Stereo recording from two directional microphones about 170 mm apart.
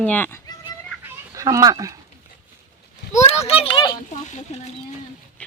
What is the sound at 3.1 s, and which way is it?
Speech, 40° left (ahead or behind).